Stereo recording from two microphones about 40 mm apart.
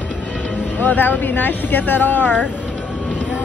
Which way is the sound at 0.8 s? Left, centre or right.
Left.